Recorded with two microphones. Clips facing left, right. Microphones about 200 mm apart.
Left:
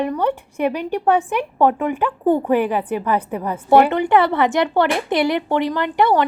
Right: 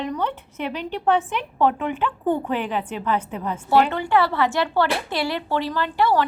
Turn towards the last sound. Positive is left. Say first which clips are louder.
# left 4 dB
turn(degrees=20)  # may be behind; listen again after turning